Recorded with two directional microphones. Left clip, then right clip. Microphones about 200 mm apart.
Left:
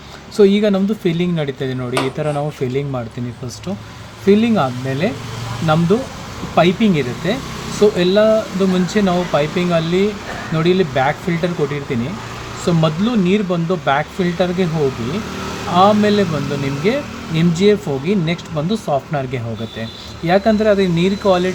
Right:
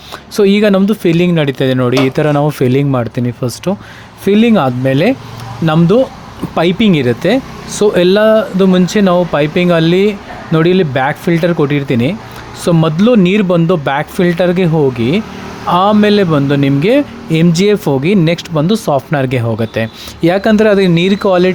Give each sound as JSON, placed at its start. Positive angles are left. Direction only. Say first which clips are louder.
{"t": 0.3, "sound": "speech", "louder": "right 4 dB", "side_deg": -45}
{"t": 4.3, "sound": "speech", "louder": "right 4 dB", "side_deg": -50}
{"t": 15.7, "sound": "speech", "louder": "right 3 dB", "side_deg": -45}